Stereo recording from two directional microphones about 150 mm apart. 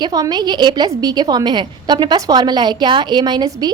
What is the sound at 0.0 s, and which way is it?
A woman's voice, 25° right (ahead or behind).